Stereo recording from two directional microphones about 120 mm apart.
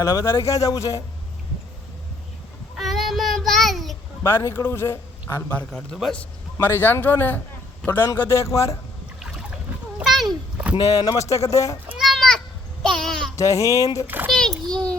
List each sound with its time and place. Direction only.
0.0 s speech: 25° left (ahead or behind)
2.7 s child singing: centre (ahead or behind)
4.2 s speech: 20° left (ahead or behind)
5.7 s speech: 5° left (ahead or behind)
6.6 s a man's voice: 20° left (ahead or behind)
10.0 s a sound: centre (ahead or behind)
10.8 s speech: 30° left (ahead or behind)
11.9 s children playing: centre (ahead or behind)
12.9 s speech: 5° left (ahead or behind)
13.3 s speech: 25° left (ahead or behind)
14.3 s a child's voice: 5° left (ahead or behind)